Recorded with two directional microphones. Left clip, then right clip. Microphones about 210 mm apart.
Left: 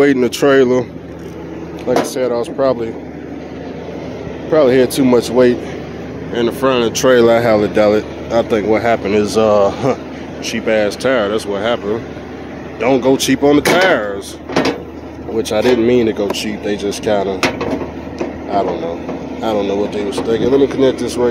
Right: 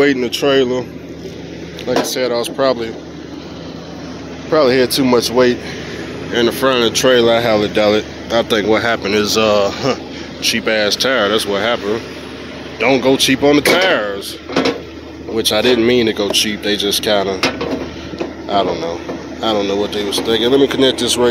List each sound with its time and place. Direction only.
0.0 s speech: 20° left (ahead or behind)
0.3 s speech: 30° left (ahead or behind)
1.9 s speech: 15° left (ahead or behind)
4.5 s speech: 10° left (ahead or behind)
6.3 s speech: centre (ahead or behind)
6.9 s speech: 15° left (ahead or behind)
10.4 s speech: 5° left (ahead or behind)
12.8 s speech: 10° left (ahead or behind)
15.3 s speech: 5° left (ahead or behind)
18.5 s speech: centre (ahead or behind)